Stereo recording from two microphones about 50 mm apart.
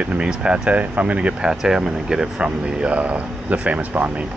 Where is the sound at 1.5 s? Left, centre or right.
Centre.